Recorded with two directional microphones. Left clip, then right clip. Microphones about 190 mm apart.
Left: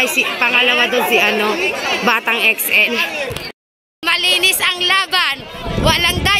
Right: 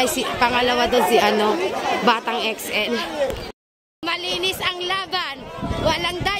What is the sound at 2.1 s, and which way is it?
Speech, centre (ahead or behind).